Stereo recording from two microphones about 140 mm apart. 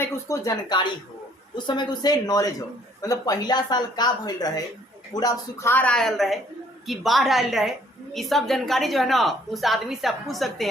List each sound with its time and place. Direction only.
0.0 s a woman's voice: 25° left (ahead or behind); by 10.7 s centre (ahead or behind)